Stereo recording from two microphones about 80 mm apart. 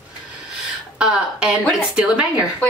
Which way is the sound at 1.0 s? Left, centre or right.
Centre.